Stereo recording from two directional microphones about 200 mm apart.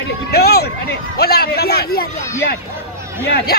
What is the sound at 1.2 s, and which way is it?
Speech, 50° left (ahead or behind).